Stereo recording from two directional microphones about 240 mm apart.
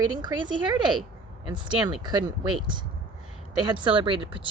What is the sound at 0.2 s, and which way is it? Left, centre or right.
A woman's voice, centre.